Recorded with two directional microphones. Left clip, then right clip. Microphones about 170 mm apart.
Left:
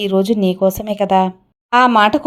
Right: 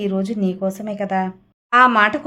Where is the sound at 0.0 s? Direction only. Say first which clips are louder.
Left 7 dB; 30° left (ahead or behind).